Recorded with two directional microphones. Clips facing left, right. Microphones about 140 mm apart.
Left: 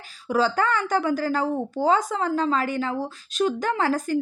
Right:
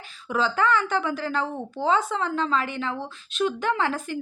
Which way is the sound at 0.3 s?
40° left (ahead or behind).